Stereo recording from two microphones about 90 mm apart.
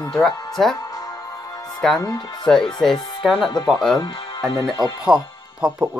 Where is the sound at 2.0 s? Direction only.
45° left (ahead or behind).